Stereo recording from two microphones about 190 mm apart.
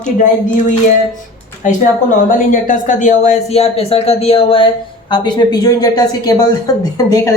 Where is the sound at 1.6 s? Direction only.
40° left (ahead or behind).